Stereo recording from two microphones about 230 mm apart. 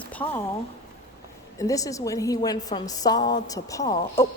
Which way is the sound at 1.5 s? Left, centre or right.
Centre.